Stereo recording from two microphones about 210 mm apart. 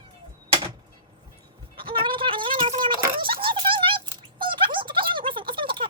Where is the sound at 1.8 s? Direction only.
25° right (ahead or behind).